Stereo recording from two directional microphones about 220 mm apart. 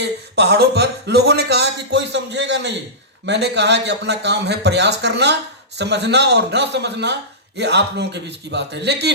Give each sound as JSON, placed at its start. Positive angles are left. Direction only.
{"t": 0.0, "sound": "a man's voice", "side_deg": -50}